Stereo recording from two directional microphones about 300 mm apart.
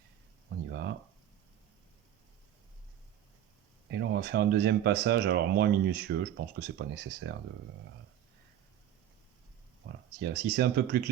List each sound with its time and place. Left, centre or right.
0.7 s a sound: right
3.9 s speech: right
10.2 s speech: right